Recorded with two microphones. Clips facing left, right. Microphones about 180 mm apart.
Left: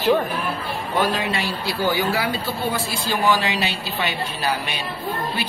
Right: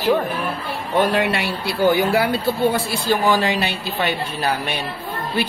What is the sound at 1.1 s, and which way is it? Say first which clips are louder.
A woman's voice: right 4 dB; 65° right (ahead or behind).